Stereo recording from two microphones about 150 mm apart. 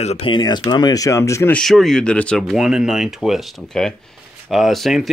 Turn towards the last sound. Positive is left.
turn(degrees=0)  # may be behind; listen again after turning